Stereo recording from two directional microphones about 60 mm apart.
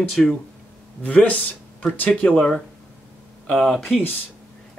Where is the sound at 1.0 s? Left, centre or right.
Left.